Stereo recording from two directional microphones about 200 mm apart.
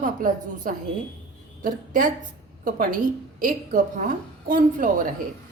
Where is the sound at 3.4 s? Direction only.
40° right (ahead or behind).